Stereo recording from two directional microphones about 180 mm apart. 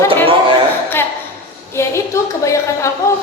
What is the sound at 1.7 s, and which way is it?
A woman's voice, 15° left (ahead or behind).